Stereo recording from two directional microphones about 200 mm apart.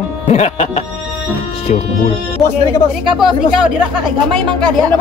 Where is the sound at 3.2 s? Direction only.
Centre (ahead or behind).